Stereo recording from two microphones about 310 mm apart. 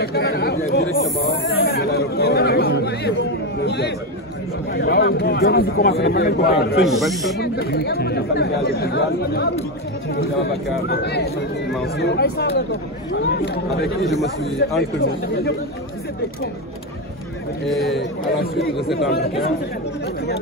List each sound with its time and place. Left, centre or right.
0.0 s chatter: left
3.6 s a man's voice: left
7.0 s speech: centre
7.3 s a man's voice: left
10.9 s a man's voice: left
17.6 s speech: centre
18.2 s speech: left